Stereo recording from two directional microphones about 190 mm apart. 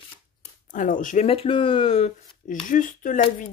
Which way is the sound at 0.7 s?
45° left (ahead or behind).